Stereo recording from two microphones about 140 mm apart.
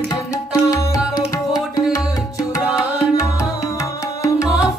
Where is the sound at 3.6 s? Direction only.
25° left (ahead or behind).